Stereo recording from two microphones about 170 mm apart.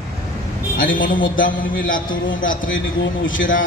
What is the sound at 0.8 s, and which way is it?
A man's voice, 55° left (ahead or behind).